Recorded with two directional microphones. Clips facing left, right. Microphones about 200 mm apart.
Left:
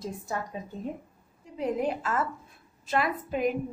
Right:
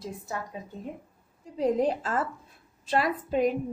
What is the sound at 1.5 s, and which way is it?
A woman's voice, 35° right (ahead or behind).